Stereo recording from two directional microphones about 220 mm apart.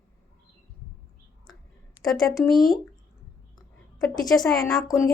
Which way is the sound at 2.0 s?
Centre (ahead or behind).